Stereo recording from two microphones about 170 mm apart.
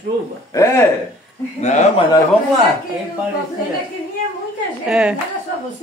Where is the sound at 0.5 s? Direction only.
15° left (ahead or behind).